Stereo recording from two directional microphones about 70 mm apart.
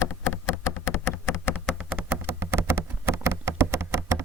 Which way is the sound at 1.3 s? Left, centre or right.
Left.